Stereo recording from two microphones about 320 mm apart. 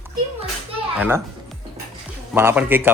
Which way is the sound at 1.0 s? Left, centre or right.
Centre.